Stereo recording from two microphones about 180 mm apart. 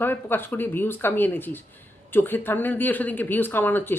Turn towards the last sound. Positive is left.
turn(degrees=10)  # may be behind; listen again after turning